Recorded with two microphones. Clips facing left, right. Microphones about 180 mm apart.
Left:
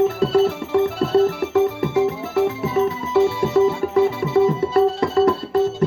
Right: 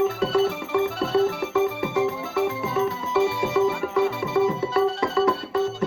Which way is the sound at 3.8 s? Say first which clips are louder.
Left 5 dB; 40° left (ahead or behind).